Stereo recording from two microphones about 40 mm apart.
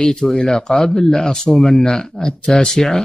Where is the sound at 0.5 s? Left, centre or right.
Centre.